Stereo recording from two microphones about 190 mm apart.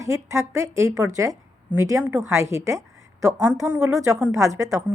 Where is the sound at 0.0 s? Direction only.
15° right (ahead or behind).